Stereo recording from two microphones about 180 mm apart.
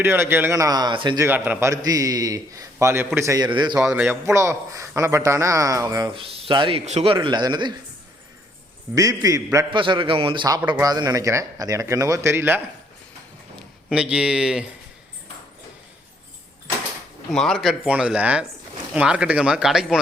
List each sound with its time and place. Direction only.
0.0 s speech: 10° right (ahead or behind)
1.3 s a man's voice: 10° right (ahead or behind)
3.8 s a man's voice: 10° right (ahead or behind)
9.0 s a man's voice: 20° right (ahead or behind)
9.8 s a man's voice: 30° right (ahead or behind); by 12.6 s 10° right (ahead or behind)
13.9 s speech: 5° right (ahead or behind)
17.3 s speech: centre (ahead or behind)